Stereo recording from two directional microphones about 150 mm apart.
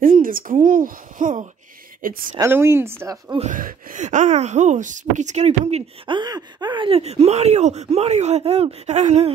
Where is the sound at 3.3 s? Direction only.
60° right (ahead or behind).